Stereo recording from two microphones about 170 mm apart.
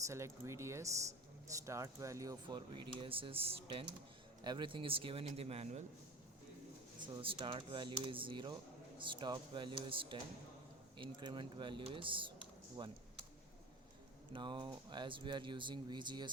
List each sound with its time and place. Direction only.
0.1 s speech: 15° right (ahead or behind); by 5.8 s 35° right (ahead or behind)
7.1 s speech: 30° right (ahead or behind)
14.3 s speech: 30° right (ahead or behind)